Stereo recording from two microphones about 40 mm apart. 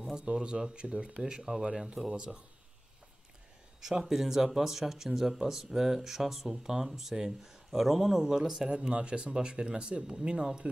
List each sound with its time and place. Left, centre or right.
0.2 s speech: right
4.0 s speech: centre
8.6 s speech: right